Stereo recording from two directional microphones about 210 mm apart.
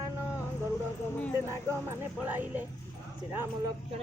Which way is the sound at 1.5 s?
10° right (ahead or behind).